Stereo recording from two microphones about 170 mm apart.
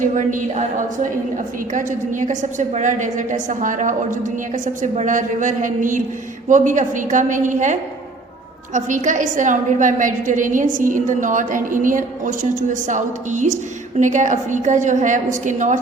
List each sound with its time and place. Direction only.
0.0 s a woman's voice: 50° right (ahead or behind)
1.7 s a woman's voice: 50° right (ahead or behind)